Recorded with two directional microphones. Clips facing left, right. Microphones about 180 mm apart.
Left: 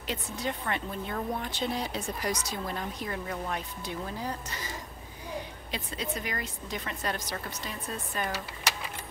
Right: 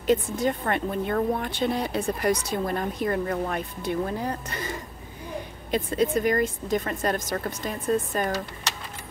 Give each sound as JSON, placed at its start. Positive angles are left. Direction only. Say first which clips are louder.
{"t": 0.0, "sound": "speech", "louder": "right 11 dB", "side_deg": -50}